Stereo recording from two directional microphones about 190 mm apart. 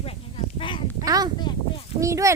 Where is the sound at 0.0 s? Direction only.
30° left (ahead or behind).